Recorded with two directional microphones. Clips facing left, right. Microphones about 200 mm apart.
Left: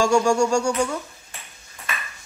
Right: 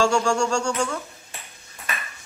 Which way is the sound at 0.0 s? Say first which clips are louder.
Left 3 dB; 10° left (ahead or behind).